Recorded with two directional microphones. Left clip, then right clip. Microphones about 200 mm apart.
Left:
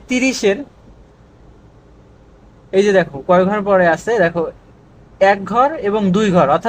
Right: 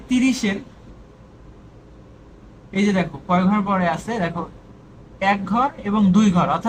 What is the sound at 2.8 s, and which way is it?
A man's voice, 55° left (ahead or behind).